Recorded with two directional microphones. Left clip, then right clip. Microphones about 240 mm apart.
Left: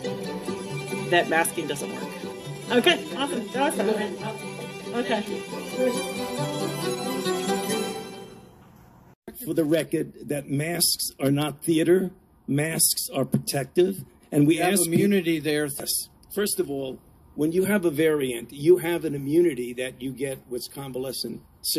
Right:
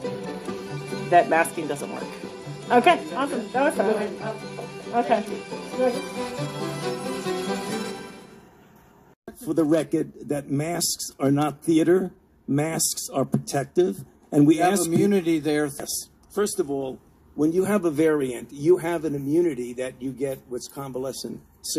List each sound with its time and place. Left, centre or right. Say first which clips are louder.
0.0 s music: even; left
2.7 s speech: right 3 dB; centre
9.2 s speech: right 2 dB; centre